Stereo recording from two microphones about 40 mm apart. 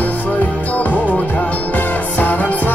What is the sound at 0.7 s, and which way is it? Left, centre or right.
Music, left.